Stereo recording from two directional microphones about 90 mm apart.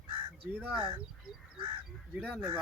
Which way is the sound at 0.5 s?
15° right (ahead or behind).